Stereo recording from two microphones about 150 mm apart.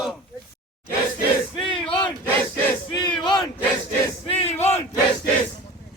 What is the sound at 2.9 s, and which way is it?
Battle cry, 30° left (ahead or behind).